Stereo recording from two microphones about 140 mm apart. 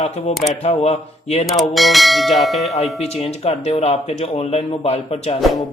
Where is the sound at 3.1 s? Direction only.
45° left (ahead or behind).